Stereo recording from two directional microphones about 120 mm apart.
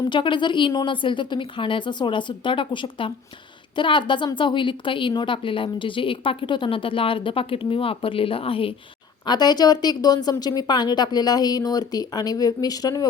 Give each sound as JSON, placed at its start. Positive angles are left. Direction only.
{"t": 0.0, "sound": "a woman's voice", "side_deg": 40}
{"t": 9.2, "sound": "a woman's voice", "side_deg": 35}